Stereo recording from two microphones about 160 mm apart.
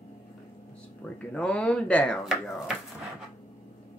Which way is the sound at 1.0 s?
10° left (ahead or behind).